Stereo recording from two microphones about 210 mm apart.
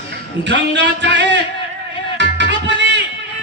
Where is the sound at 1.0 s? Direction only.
60° right (ahead or behind).